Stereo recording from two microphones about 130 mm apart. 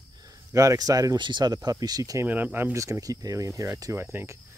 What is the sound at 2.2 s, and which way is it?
Speech, 15° right (ahead or behind).